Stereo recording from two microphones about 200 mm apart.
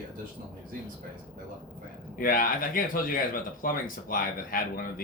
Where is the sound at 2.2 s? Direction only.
45° left (ahead or behind).